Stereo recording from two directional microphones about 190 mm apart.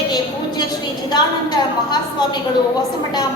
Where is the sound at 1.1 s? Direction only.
20° left (ahead or behind).